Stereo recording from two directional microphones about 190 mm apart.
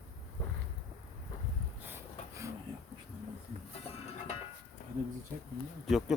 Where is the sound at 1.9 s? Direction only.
15° right (ahead or behind).